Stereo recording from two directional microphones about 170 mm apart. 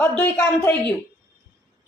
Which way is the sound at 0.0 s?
10° left (ahead or behind).